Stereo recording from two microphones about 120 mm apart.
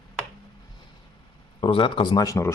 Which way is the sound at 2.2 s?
25° left (ahead or behind).